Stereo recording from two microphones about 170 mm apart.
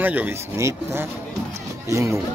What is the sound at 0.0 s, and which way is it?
Speech, 10° right (ahead or behind).